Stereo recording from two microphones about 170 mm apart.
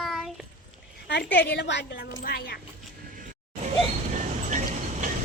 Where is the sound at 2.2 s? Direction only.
65° left (ahead or behind).